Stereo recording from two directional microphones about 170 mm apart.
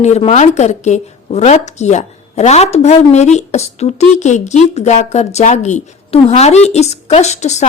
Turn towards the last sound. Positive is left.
turn(degrees=40)  # may be behind; listen again after turning